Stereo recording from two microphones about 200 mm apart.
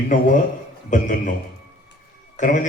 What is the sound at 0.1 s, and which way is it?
A man's voice, 40° left (ahead or behind).